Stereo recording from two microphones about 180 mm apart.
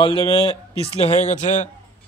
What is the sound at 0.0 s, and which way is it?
Speech, 30° left (ahead or behind).